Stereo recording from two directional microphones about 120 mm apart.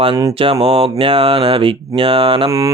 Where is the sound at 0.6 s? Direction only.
50° right (ahead or behind).